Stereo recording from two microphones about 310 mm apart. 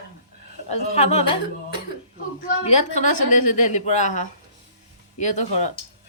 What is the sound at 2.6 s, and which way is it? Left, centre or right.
A woman's voice, left.